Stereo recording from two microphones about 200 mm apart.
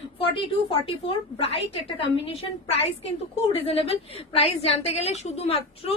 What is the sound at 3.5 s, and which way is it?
A woman's voice, 30° left (ahead or behind).